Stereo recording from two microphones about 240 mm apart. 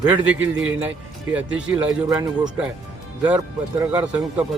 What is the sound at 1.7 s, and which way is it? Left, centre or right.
Speech, centre.